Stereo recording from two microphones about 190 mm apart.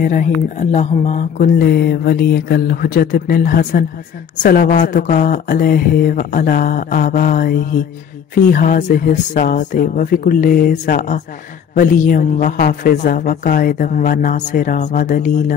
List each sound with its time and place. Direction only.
0.0 s speech: 45° left (ahead or behind)